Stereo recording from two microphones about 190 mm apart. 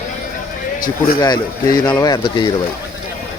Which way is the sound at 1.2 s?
20° left (ahead or behind).